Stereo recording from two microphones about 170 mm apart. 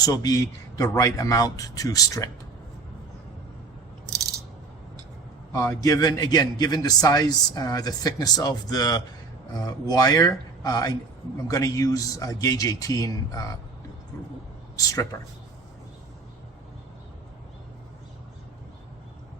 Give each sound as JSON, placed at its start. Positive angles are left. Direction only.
{"t": 0.0, "sound": "a man's voice", "side_deg": 20}
{"t": 5.5, "sound": "a man's voice", "side_deg": 20}
{"t": 14.8, "sound": "a man's voice", "side_deg": 20}